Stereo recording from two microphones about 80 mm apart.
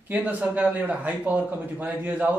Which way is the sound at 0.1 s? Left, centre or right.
Centre.